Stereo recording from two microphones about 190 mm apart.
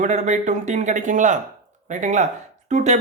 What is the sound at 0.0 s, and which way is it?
Speech, 40° right (ahead or behind).